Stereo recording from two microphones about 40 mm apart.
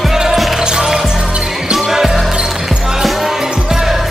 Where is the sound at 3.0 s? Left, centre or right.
Centre.